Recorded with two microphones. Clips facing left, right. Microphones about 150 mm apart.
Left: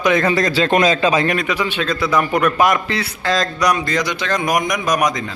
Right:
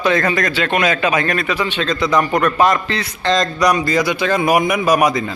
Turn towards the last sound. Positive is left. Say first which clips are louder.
# right 4 dB
turn(degrees=-5)  # may be behind; listen again after turning